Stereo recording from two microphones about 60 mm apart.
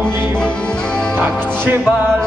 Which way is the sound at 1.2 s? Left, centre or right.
Right.